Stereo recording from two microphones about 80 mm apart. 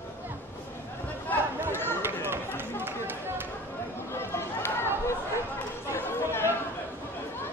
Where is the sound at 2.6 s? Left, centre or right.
Right.